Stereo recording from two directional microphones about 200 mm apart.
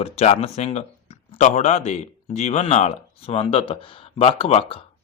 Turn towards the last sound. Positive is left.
turn(degrees=30)  # may be behind; listen again after turning